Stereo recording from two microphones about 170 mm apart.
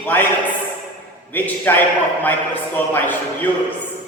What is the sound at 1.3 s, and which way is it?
A man's voice, 10° left (ahead or behind).